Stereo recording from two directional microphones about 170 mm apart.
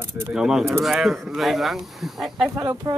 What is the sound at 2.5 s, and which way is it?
Speech, 20° right (ahead or behind).